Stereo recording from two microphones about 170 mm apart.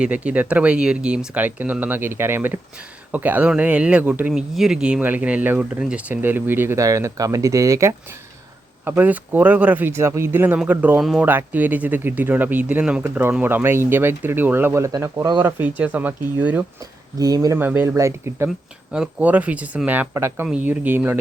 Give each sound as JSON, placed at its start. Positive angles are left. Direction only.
{"t": 0.0, "sound": "speech", "side_deg": -5}
{"t": 15.4, "sound": "speech", "side_deg": -10}
{"t": 17.2, "sound": "speech", "side_deg": -20}
{"t": 18.4, "sound": "speech", "side_deg": -5}